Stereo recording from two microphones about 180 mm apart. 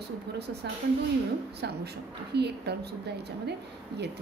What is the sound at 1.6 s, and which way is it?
A woman's voice, 65° right (ahead or behind).